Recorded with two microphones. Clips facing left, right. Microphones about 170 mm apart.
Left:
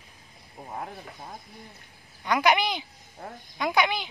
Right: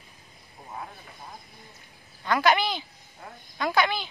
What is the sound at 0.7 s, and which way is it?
Speech, 45° left (ahead or behind).